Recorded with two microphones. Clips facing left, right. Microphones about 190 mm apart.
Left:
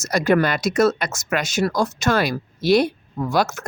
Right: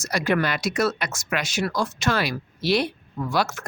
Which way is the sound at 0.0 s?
45° left (ahead or behind).